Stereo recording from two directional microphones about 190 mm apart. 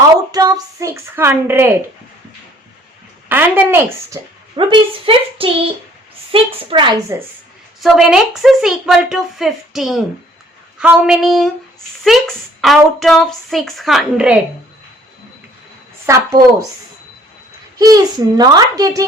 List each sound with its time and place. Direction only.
0.3 s a woman's voice: 20° right (ahead or behind)
3.2 s a woman's voice: 10° right (ahead or behind)
4.5 s a child's voice: 25° right (ahead or behind)
7.8 s a woman's voice: centre (ahead or behind)
16.0 s a child's voice: 20° right (ahead or behind)
17.7 s a child's voice: 20° right (ahead or behind)